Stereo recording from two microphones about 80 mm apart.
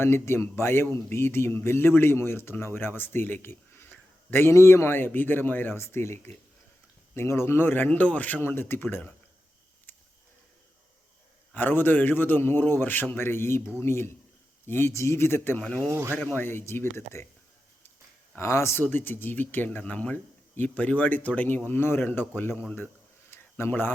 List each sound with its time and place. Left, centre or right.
0.0 s speech: left
9.9 s a sound: left
11.5 s speech: left
15.6 s speech: centre
15.9 s speech: right
16.3 s speech: left
18.3 s speech: left
23.3 s a sound: left